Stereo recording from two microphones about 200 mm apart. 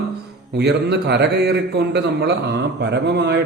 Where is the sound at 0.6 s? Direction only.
55° right (ahead or behind).